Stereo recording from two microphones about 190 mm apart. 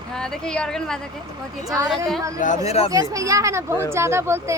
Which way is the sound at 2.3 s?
40° left (ahead or behind).